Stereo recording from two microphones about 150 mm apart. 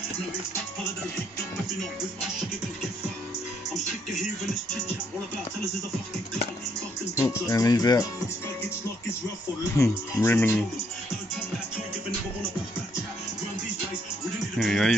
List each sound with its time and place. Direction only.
7.2 s music: 20° left (ahead or behind)
9.8 s speech: 15° left (ahead or behind)
14.6 s speech: centre (ahead or behind)